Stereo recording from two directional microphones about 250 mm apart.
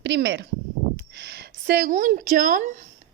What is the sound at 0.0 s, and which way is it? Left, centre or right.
A woman's voice, right.